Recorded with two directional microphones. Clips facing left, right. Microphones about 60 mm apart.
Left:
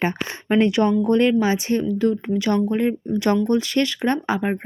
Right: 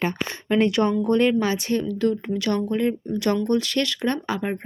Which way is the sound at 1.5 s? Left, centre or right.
Left.